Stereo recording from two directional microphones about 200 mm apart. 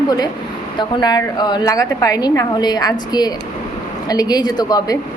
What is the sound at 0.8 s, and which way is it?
A woman's voice, 20° left (ahead or behind).